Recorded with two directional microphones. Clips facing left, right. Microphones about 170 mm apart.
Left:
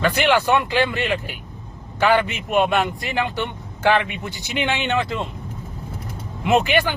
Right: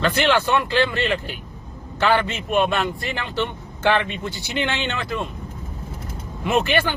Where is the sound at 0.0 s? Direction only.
15° left (ahead or behind).